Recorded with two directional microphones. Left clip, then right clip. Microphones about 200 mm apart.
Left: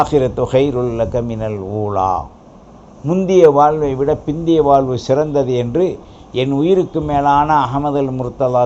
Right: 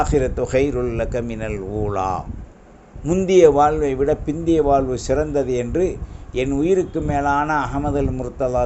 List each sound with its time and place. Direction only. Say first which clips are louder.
0.0 s a man's voice: left 5 dB; 30° right (ahead or behind)